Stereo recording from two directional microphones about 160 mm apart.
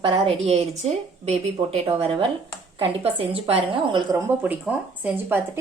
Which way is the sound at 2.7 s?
35° right (ahead or behind).